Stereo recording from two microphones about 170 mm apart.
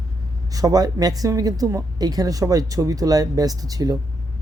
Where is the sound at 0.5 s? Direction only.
20° right (ahead or behind).